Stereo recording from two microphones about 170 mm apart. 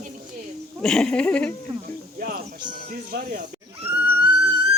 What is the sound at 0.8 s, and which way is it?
Speech, 5° left (ahead or behind).